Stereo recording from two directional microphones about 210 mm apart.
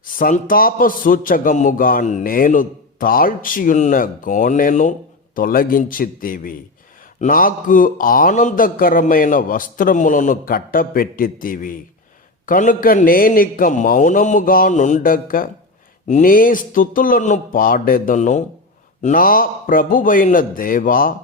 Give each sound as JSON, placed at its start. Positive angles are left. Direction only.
{"t": 0.0, "sound": "a man's voice", "side_deg": 40}